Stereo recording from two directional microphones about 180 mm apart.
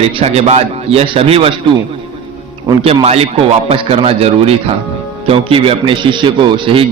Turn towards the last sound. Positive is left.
turn(degrees=-30)  # may be behind; listen again after turning